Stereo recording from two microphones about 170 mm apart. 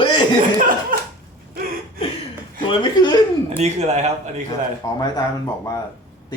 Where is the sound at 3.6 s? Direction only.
40° right (ahead or behind).